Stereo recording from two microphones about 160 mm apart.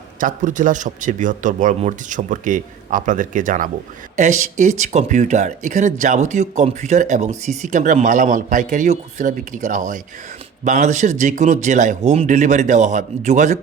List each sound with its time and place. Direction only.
0.2 s speech: 55° right (ahead or behind)